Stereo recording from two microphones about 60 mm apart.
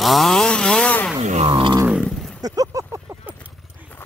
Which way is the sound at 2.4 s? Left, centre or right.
Right.